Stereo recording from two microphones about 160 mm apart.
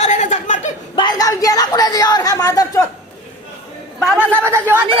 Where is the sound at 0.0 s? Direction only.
45° left (ahead or behind).